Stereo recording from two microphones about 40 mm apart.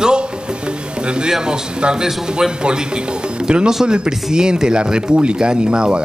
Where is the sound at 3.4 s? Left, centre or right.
Centre.